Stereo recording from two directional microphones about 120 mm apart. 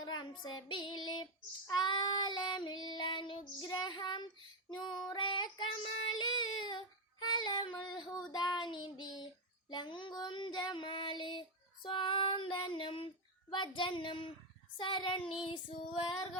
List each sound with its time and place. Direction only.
0.0 s child singing: 40° left (ahead or behind)
13.5 s speech: 40° left (ahead or behind)
14.8 s child singing: 40° left (ahead or behind)